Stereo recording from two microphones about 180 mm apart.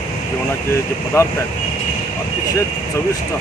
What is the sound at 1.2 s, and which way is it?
Speech, 15° left (ahead or behind).